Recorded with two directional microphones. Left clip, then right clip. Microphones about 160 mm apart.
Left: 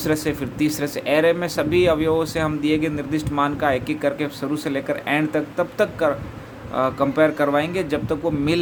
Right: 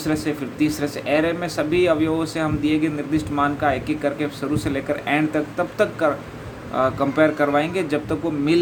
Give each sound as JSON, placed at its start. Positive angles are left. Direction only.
{"t": 0.0, "sound": "a man's voice", "side_deg": 40}